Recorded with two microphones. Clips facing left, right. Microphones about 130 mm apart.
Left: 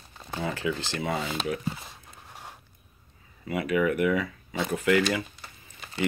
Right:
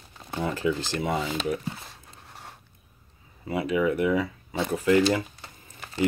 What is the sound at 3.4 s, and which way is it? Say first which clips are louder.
Speech: right 1 dB; 30° right (ahead or behind).